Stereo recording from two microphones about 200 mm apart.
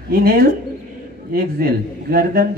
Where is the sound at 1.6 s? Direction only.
50° right (ahead or behind).